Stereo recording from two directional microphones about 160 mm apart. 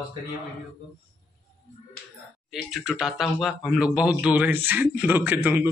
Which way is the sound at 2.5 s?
5° right (ahead or behind).